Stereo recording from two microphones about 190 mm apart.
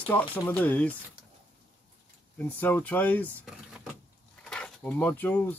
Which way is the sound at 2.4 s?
10° left (ahead or behind).